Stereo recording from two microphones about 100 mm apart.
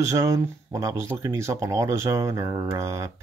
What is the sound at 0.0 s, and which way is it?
Speech, 30° right (ahead or behind).